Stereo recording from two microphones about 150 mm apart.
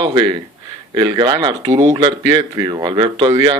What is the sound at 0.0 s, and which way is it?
Speech, 30° right (ahead or behind).